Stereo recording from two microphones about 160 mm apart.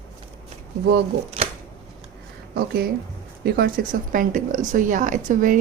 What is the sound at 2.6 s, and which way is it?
A woman's voice, 75° right (ahead or behind).